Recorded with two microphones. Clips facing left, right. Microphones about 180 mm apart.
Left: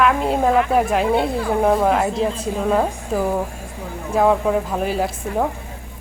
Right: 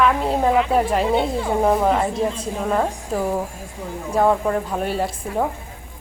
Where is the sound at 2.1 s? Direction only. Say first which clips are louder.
Left 1 dB; 25° left (ahead or behind).